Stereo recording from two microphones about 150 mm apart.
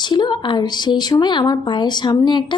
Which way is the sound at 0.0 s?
30° left (ahead or behind).